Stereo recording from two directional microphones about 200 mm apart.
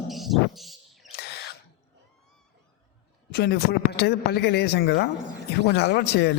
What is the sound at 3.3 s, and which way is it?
A man's voice, 50° left (ahead or behind).